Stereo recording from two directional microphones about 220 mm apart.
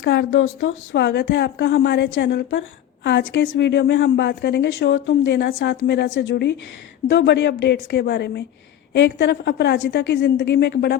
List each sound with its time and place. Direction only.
0.0 s speech: 50° left (ahead or behind)